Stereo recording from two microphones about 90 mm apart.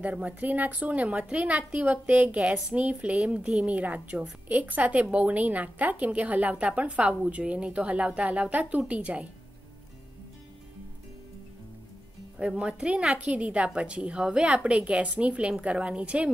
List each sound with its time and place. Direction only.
0.0 s a woman's voice: 15° right (ahead or behind)
12.4 s a woman's voice: 10° right (ahead or behind)